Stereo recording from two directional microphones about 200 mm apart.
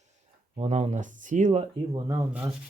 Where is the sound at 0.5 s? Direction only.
35° right (ahead or behind).